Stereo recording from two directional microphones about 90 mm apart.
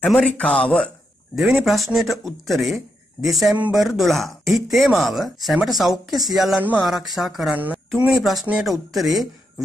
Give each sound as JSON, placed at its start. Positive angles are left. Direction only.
{"t": 0.0, "sound": "speech", "side_deg": 5}
{"t": 1.3, "sound": "speech", "side_deg": -5}
{"t": 7.5, "sound": "a sound", "side_deg": -20}
{"t": 7.9, "sound": "speech", "side_deg": 0}